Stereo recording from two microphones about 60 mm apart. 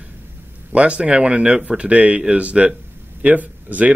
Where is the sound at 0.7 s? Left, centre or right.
Right.